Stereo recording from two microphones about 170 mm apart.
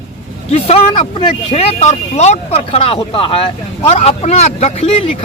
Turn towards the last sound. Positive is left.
turn(degrees=35)  # may be behind; listen again after turning